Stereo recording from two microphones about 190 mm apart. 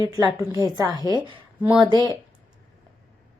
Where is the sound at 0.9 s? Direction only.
20° right (ahead or behind).